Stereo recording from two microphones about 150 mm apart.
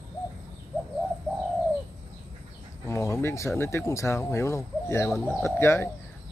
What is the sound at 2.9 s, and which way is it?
Speech, 20° left (ahead or behind).